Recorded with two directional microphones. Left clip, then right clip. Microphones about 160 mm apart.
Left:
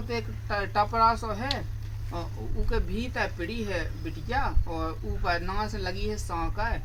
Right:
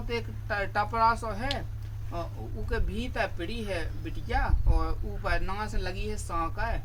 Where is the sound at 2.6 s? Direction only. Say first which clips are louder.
Left 2 dB; 10° right (ahead or behind).